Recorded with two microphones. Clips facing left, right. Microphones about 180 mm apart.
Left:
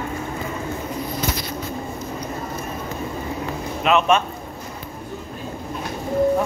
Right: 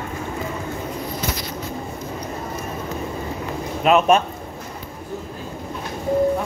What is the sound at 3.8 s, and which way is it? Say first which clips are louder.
Speech: right 2 dB; 40° right (ahead or behind).